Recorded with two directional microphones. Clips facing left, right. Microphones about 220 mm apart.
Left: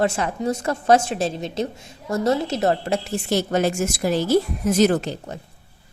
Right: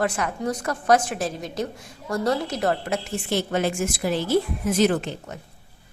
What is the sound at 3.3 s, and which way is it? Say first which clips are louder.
A woman's voice: left 3 dB; 40° left (ahead or behind).